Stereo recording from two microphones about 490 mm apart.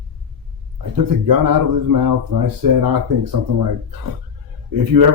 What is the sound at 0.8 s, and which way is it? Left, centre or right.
Speech, right.